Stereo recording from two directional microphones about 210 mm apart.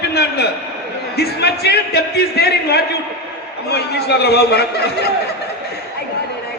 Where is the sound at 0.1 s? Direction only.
50° left (ahead or behind).